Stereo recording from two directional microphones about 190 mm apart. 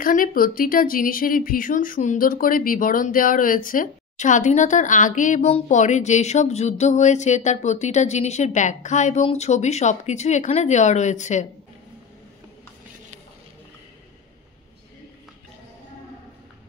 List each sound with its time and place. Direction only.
0.0 s speech: 45° left (ahead or behind)